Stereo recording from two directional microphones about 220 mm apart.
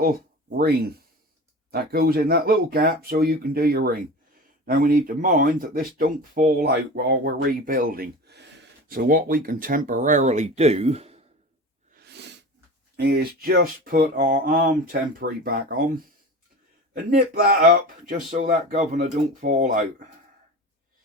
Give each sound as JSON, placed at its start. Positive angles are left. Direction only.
{"t": 1.7, "sound": "speech", "side_deg": -45}
{"t": 12.0, "sound": "sneeze", "side_deg": -50}
{"t": 13.0, "sound": "speech", "side_deg": -45}
{"t": 16.9, "sound": "speech", "side_deg": -40}